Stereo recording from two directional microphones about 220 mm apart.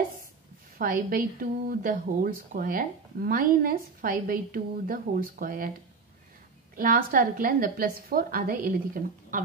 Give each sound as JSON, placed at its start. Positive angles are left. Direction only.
{"t": 0.7, "sound": "a woman's voice", "side_deg": -40}
{"t": 6.7, "sound": "a woman's voice", "side_deg": -40}